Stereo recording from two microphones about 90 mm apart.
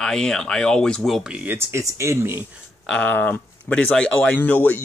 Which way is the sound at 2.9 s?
15° left (ahead or behind).